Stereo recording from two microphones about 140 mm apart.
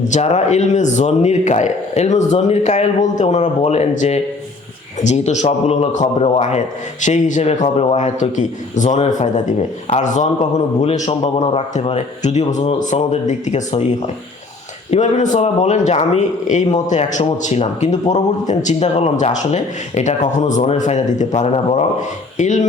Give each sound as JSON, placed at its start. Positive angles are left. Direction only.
{"t": 0.1, "sound": "speech", "side_deg": 50}
{"t": 14.8, "sound": "speech", "side_deg": 55}
{"t": 22.4, "sound": "speech", "side_deg": 60}